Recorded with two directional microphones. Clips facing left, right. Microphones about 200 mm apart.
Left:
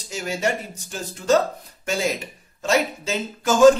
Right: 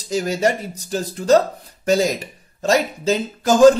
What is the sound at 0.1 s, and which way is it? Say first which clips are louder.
A man's voice: right 6 dB; 35° right (ahead or behind).